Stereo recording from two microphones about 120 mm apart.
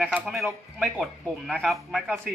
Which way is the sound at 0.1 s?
Centre (ahead or behind).